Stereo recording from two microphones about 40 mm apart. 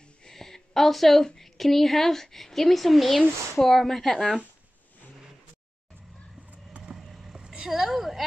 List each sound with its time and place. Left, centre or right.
0.2 s a woman's voice: centre
7.0 s vehicle: centre
7.3 s vehicle: centre
7.7 s a woman's voice: centre